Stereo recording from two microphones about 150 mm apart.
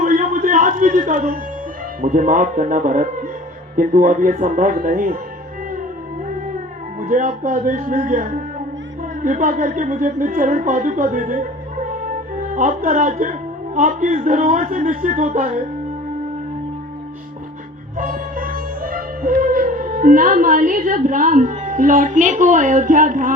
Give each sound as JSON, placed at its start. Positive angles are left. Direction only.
{"t": 0.0, "sound": "music", "side_deg": -60}
{"t": 2.0, "sound": "a man's voice", "side_deg": -65}
{"t": 7.1, "sound": "a man's voice", "side_deg": -55}
{"t": 17.9, "sound": "sitar", "side_deg": -60}